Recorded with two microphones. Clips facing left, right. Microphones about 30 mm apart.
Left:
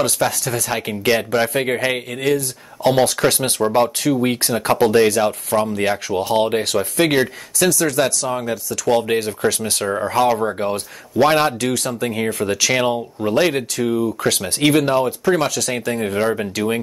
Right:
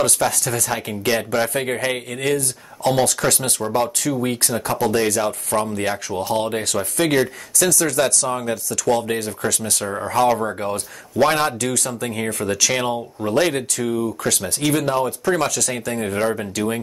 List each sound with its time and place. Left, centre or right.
0.0 s speech: centre
0.7 s speech: left
2.8 s speech: centre
4.9 s speech: centre
7.8 s speech: centre
9.8 s speech: centre
14.3 s speech: left
14.7 s speech: left
16.0 s speech: centre
16.3 s speech: centre